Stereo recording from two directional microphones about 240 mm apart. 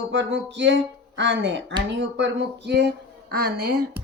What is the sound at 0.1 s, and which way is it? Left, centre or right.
Speech, right.